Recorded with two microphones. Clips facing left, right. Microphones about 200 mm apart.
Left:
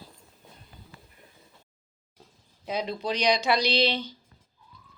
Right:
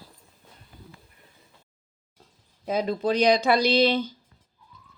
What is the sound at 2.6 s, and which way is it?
Speech, 50° right (ahead or behind).